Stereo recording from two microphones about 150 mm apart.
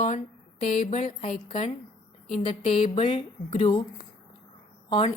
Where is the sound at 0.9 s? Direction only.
45° left (ahead or behind).